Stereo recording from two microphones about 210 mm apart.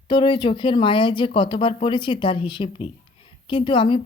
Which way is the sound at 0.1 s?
25° left (ahead or behind).